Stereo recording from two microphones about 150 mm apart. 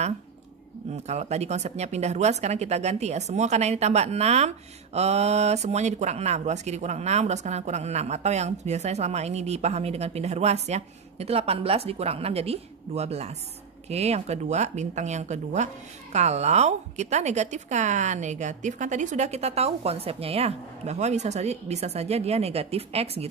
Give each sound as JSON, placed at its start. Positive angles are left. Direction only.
{"t": 1.0, "sound": "speech", "side_deg": -45}